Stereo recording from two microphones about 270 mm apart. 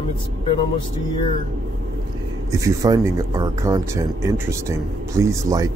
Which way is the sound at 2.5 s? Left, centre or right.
Centre.